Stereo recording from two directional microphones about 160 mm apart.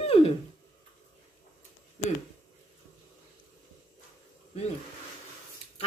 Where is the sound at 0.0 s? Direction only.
40° left (ahead or behind).